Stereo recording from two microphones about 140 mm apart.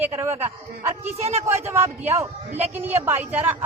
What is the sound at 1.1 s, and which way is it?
Speech, 50° right (ahead or behind).